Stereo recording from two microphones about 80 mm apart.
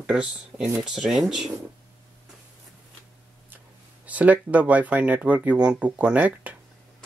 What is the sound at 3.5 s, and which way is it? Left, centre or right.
Speech, centre.